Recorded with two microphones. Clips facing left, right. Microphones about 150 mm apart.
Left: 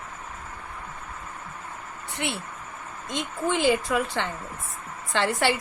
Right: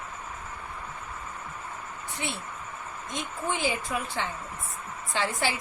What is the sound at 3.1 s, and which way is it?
Speech, 75° left (ahead or behind).